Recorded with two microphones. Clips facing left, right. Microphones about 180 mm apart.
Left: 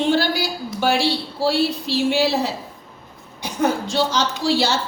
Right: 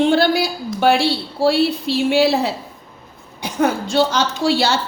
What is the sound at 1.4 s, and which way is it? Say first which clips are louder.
A woman's voice: right 4 dB; 60° right (ahead or behind).